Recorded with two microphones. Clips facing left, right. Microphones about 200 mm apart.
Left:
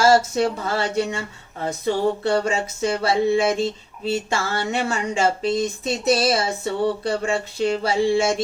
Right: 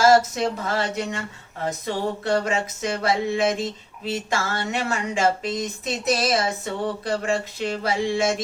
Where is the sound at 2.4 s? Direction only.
30° left (ahead or behind).